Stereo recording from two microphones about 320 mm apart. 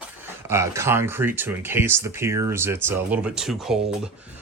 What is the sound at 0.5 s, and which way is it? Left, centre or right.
Speech, centre.